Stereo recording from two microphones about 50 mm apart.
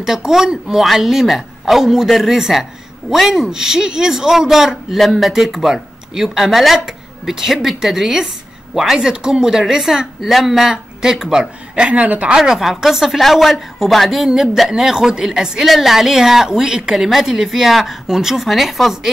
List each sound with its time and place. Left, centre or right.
0.0 s a woman's voice: centre
11.7 s speech: right
12.4 s a woman's voice: centre